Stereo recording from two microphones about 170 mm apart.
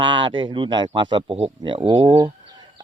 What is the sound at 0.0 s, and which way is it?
Speech, 30° right (ahead or behind).